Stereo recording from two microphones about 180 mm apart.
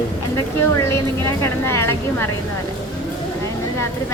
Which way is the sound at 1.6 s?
15° left (ahead or behind).